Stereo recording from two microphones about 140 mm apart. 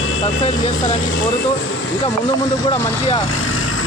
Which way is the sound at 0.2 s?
45° left (ahead or behind).